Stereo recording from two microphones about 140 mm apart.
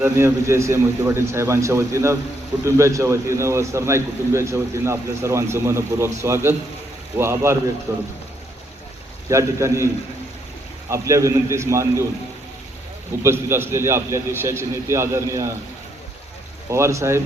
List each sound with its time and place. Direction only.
0.0 s a man's voice: 20° right (ahead or behind)
9.3 s a man's voice: 20° right (ahead or behind)
13.2 s a man's voice: 15° right (ahead or behind)
16.6 s a man's voice: 20° right (ahead or behind)